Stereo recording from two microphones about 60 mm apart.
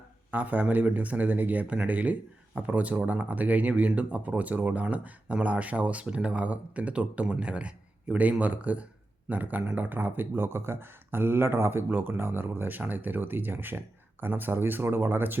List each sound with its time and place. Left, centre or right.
0.3 s speech: right